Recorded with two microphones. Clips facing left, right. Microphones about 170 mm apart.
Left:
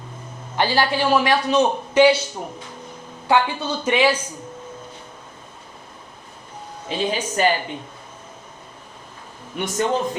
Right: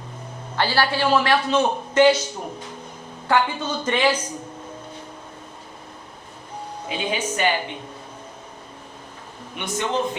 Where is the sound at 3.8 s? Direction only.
10° left (ahead or behind).